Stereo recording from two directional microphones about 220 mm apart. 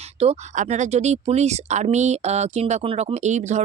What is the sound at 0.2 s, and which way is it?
Speech, 30° right (ahead or behind).